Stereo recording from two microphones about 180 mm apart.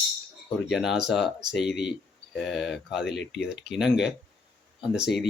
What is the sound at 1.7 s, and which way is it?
Speech, 70° left (ahead or behind).